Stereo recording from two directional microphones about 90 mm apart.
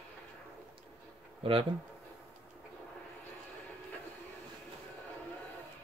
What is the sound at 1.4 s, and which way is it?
Speech, 90° right.